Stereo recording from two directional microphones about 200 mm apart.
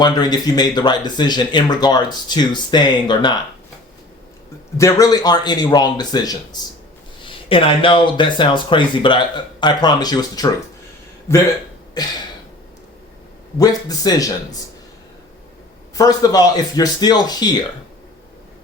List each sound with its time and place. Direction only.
0.0 s speech: 20° left (ahead or behind)
4.8 s speech: 15° left (ahead or behind)
13.6 s speech: 20° left (ahead or behind)
16.0 s speech: 20° left (ahead or behind)